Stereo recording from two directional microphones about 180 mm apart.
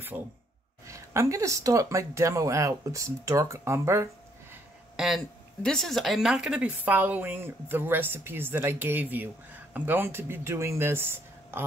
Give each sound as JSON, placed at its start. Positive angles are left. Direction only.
{"t": 0.1, "sound": "speech", "side_deg": -10}
{"t": 4.9, "sound": "speech", "side_deg": 0}